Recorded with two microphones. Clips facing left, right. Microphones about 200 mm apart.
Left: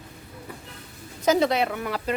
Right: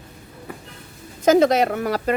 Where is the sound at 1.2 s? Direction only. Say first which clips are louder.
Right 6 dB; 45° right (ahead or behind).